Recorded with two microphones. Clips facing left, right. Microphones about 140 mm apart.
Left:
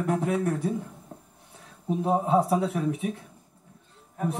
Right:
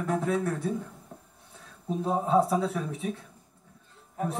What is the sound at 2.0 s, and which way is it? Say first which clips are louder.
Speech: left 1 dB; 15° left (ahead or behind).